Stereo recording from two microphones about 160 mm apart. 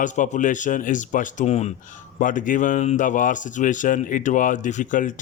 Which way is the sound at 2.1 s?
55° left (ahead or behind).